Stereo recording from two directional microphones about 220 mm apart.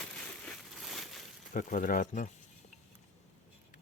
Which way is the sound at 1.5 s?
40° left (ahead or behind).